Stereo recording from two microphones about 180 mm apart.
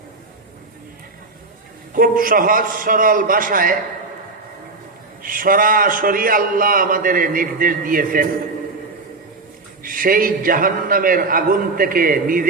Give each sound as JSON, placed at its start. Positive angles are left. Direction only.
{"t": 2.0, "sound": "a man's voice", "side_deg": -50}
{"t": 5.2, "sound": "a man's voice", "side_deg": -50}
{"t": 9.8, "sound": "a man's voice", "side_deg": -50}